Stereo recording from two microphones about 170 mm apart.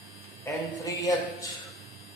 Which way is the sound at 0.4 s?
20° left (ahead or behind).